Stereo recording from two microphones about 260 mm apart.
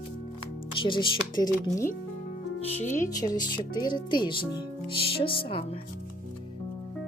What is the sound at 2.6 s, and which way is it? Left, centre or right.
Speech, left.